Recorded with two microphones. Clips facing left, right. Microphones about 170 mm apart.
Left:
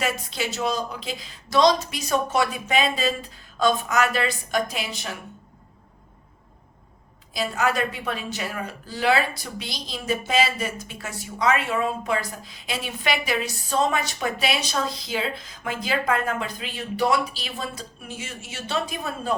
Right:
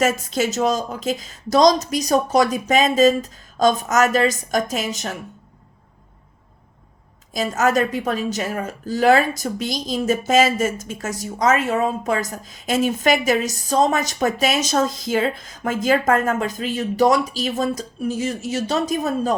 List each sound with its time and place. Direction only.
0.0 s a woman's voice: 45° right (ahead or behind)
7.3 s a woman's voice: 45° right (ahead or behind)